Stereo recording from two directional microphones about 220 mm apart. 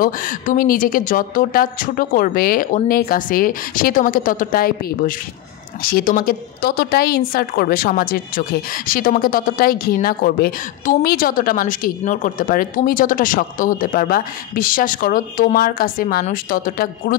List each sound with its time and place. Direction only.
0.0 s a woman's voice: 40° left (ahead or behind)